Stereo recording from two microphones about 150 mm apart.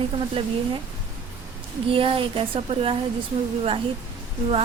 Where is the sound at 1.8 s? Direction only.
35° right (ahead or behind).